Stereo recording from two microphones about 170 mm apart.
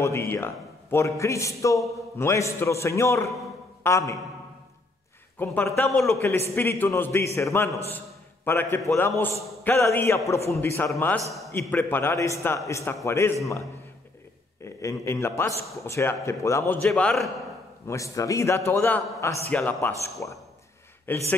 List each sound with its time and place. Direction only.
0.0 s a man's voice: 15° left (ahead or behind)
5.4 s a man's voice: 10° left (ahead or behind)
14.6 s a man's voice: 15° left (ahead or behind)
17.8 s a man's voice: 20° left (ahead or behind)